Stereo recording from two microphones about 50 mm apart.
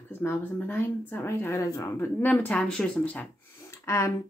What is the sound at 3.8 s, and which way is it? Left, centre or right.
Speech, left.